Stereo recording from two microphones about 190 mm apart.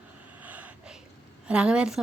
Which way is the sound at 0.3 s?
10° right (ahead or behind).